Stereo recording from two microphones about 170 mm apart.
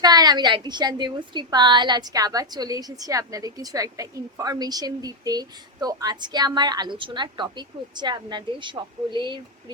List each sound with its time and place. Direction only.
0.0 s a woman's voice: 25° right (ahead or behind)